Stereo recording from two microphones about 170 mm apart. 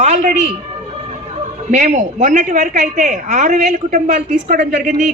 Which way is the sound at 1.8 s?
50° right (ahead or behind).